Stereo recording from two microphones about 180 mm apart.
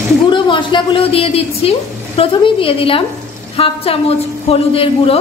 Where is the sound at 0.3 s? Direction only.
25° left (ahead or behind).